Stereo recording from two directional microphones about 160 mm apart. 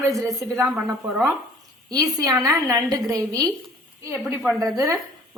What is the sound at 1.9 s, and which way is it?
A woman's voice, 20° right (ahead or behind).